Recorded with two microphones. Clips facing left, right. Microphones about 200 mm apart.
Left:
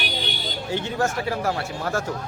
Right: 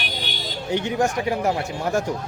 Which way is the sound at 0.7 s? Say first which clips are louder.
Right 3 dB; 15° right (ahead or behind).